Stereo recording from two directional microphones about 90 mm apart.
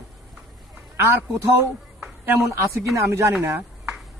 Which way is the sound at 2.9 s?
35° right (ahead or behind).